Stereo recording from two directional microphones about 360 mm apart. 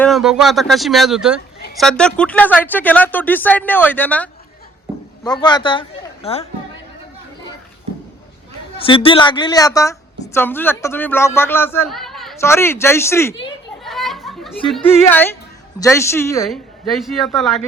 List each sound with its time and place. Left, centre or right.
0.0 s speech: centre
8.8 s a woman's voice: centre